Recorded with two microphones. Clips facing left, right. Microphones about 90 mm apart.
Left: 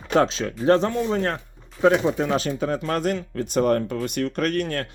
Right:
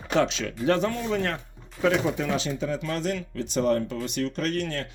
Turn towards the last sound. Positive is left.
turn(degrees=50)  # may be behind; listen again after turning